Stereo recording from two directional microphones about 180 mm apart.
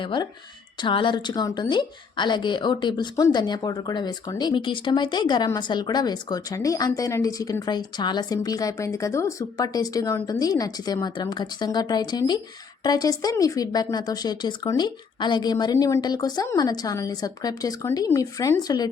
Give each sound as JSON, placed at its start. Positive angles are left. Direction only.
{"t": 0.0, "sound": "speech", "side_deg": 25}